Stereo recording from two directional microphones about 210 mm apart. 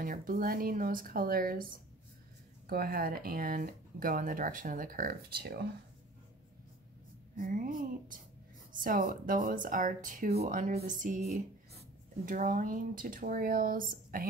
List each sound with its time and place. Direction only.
0.0 s speech: 40° right (ahead or behind)
7.3 s speech: 40° right (ahead or behind)
12.3 s speech: 40° right (ahead or behind)